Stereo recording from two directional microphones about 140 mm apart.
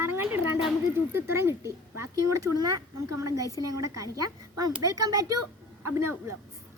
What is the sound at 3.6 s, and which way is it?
A woman's voice, 25° right (ahead or behind).